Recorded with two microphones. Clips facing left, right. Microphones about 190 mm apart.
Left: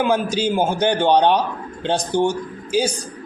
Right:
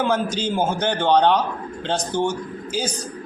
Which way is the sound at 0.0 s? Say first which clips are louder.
Left 3 dB; 10° left (ahead or behind).